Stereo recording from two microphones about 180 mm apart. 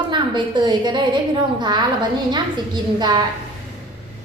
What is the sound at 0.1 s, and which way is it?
A woman's voice, 25° right (ahead or behind).